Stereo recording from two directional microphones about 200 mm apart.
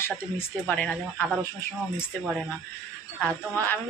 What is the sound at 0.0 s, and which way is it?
Speech, 10° left (ahead or behind).